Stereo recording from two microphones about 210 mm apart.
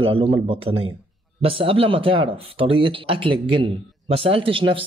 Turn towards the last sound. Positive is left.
turn(degrees=-25)  # may be behind; listen again after turning